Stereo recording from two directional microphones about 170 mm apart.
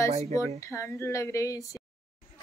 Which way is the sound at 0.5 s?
15° left (ahead or behind).